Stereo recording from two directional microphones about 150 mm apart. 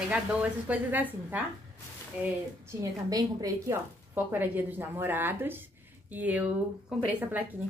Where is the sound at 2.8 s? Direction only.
25° right (ahead or behind).